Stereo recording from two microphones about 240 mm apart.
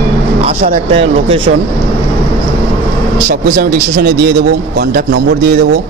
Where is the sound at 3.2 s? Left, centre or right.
Right.